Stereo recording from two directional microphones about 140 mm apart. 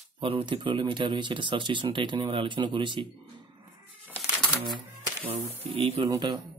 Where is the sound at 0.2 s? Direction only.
35° right (ahead or behind).